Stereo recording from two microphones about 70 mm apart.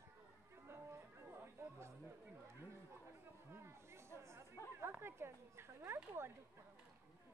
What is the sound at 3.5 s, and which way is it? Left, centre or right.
Chatter, right.